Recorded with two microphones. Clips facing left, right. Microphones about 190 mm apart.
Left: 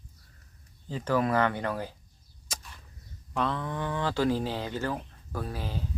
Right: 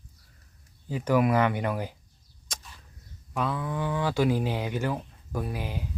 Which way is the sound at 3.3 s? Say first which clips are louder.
Right 1 dB; 5° right (ahead or behind).